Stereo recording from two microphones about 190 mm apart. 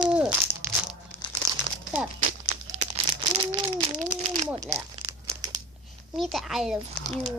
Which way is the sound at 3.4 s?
30° right (ahead or behind).